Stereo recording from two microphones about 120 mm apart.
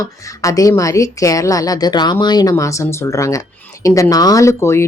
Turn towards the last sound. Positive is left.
turn(degrees=25)  # may be behind; listen again after turning